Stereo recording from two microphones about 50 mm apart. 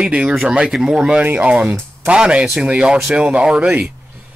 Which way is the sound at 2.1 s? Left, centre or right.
Centre.